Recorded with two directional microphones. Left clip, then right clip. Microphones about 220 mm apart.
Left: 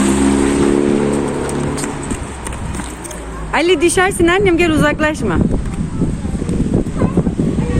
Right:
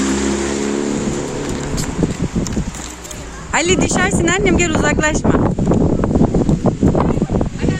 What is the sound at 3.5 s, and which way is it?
Speech, centre (ahead or behind).